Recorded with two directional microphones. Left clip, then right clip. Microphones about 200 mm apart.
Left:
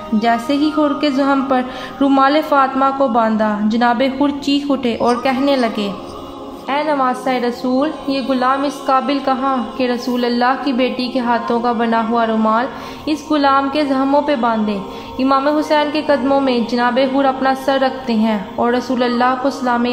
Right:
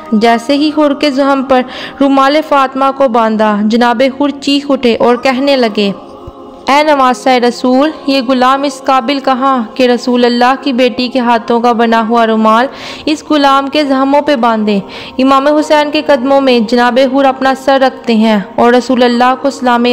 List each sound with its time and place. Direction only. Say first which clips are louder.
0.2 s a woman's voice: right 7 dB; 45° right (ahead or behind)
6.6 s a woman's voice: right 9 dB; 55° right (ahead or behind)